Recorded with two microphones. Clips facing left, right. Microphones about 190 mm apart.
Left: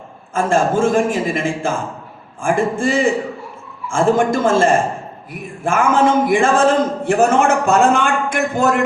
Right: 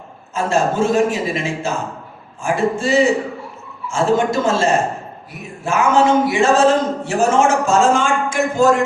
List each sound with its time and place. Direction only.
0.3 s a man's voice: 50° left (ahead or behind)